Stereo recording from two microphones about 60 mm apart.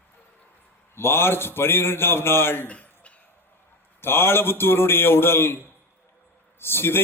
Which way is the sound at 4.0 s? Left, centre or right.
Left.